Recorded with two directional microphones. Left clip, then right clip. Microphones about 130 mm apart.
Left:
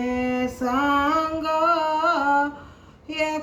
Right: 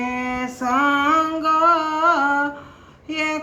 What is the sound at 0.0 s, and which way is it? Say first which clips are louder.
Female singing: even; 35° left (ahead or behind).